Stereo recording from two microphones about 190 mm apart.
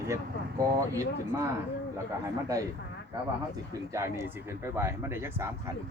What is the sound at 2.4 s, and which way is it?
Speech, 20° right (ahead or behind).